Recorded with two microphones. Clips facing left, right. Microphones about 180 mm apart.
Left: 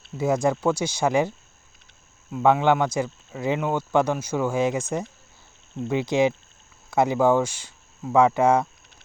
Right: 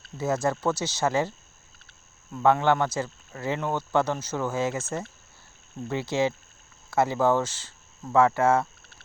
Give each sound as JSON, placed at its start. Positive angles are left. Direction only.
{"t": 0.2, "sound": "speech", "side_deg": 15}
{"t": 2.3, "sound": "speech", "side_deg": 15}